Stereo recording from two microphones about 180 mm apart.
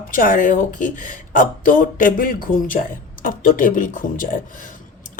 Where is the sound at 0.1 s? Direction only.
50° left (ahead or behind).